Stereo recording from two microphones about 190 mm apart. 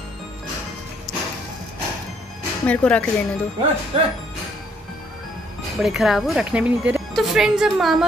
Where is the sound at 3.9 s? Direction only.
30° right (ahead or behind).